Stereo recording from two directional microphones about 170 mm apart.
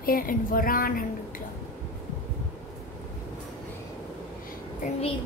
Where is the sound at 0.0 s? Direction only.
55° left (ahead or behind).